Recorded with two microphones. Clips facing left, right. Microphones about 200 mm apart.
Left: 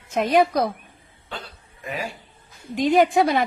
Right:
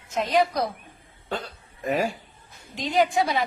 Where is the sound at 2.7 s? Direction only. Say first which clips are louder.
Left 5 dB; 55° left (ahead or behind).